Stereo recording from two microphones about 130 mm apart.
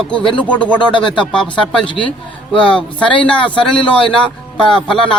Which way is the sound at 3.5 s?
40° left (ahead or behind).